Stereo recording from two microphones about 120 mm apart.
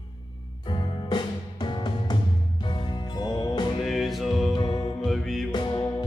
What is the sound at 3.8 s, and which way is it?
Music, centre (ahead or behind).